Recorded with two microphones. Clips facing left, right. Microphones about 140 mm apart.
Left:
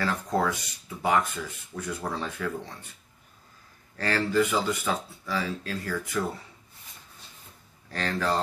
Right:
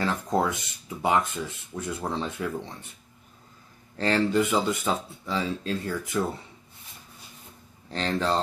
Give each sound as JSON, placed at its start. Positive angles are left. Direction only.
{"t": 0.0, "sound": "speech", "side_deg": -20}
{"t": 3.9, "sound": "speech", "side_deg": -20}
{"t": 7.9, "sound": "speech", "side_deg": -25}